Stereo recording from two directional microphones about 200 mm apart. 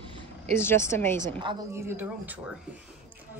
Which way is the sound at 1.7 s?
10° right (ahead or behind).